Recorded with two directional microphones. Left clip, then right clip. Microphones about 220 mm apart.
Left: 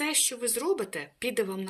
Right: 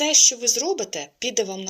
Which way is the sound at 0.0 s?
15° left (ahead or behind).